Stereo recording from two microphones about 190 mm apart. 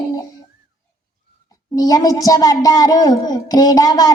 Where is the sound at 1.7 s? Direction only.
20° left (ahead or behind).